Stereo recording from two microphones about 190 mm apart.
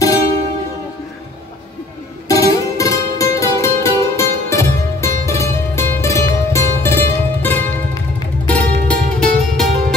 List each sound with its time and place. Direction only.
2.2 s music: 15° left (ahead or behind)